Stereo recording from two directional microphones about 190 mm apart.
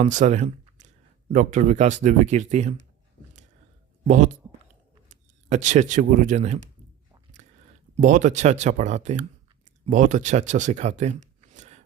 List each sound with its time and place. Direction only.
0.0 s speech: 40° right (ahead or behind)
4.0 s speech: 40° right (ahead or behind)
7.4 s a sound: 35° right (ahead or behind)
7.9 s speech: 40° right (ahead or behind)